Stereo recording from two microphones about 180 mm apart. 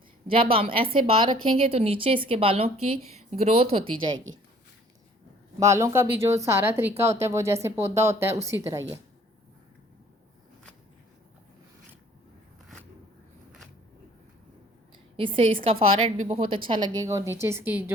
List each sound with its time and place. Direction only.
0.3 s a woman's voice: 30° right (ahead or behind)
5.5 s speech: 15° right (ahead or behind)
15.1 s a woman's voice: 30° right (ahead or behind); by 17.9 s 10° right (ahead or behind)